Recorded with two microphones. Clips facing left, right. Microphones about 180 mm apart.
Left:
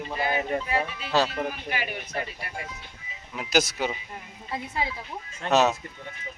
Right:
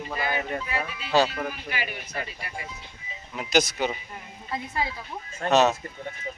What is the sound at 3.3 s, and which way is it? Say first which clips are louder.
Speech: right 1 dB; 5° left (ahead or behind).